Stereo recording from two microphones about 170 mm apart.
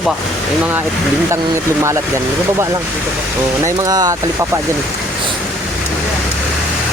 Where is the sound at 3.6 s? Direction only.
20° right (ahead or behind).